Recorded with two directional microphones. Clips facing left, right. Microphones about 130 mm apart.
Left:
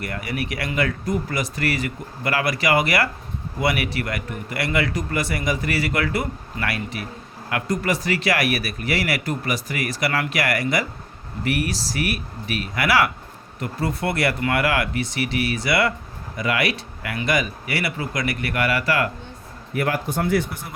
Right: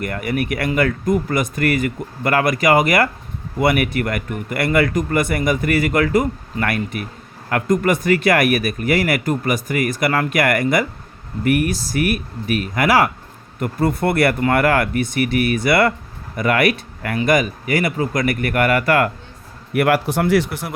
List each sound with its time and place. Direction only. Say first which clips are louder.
0.0 s speech: right 6 dB; 50° right (ahead or behind)
19.7 s speech: right 7 dB; 70° right (ahead or behind)